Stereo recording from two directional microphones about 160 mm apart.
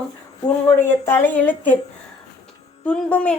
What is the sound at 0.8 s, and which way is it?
Speech, 15° left (ahead or behind).